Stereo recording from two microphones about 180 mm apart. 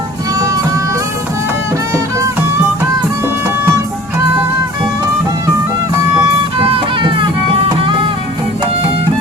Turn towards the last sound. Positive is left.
turn(degrees=-30)  # may be behind; listen again after turning